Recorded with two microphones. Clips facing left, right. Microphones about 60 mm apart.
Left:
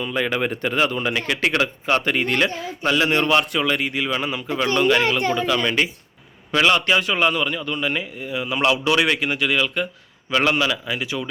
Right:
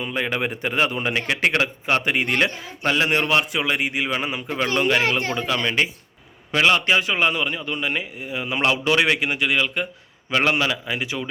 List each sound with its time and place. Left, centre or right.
0.0 s a man's voice: centre
3.4 s speech: centre
3.7 s a man's voice: right